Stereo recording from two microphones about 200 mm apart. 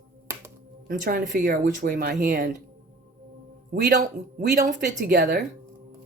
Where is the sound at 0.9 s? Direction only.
45° right (ahead or behind).